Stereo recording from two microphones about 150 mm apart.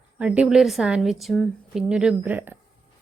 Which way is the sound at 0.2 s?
10° right (ahead or behind).